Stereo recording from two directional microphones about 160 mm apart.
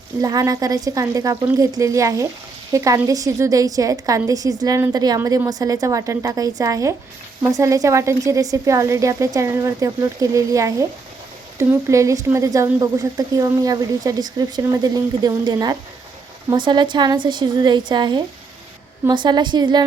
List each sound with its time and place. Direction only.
0.2 s speech: 20° right (ahead or behind)